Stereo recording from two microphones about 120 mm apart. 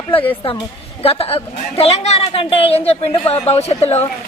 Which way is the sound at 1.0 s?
55° left (ahead or behind).